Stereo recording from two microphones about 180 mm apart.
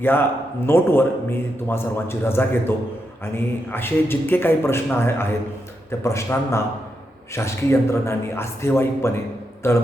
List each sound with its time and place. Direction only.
0.0 s a man's voice: 10° left (ahead or behind)